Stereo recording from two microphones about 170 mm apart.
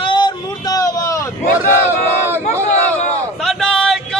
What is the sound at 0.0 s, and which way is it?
Vehicle, 30° left (ahead or behind).